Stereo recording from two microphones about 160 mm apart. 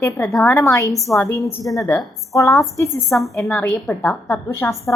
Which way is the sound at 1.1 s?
15° left (ahead or behind).